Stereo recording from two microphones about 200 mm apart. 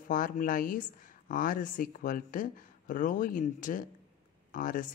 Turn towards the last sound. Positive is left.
turn(degrees=40)  # may be behind; listen again after turning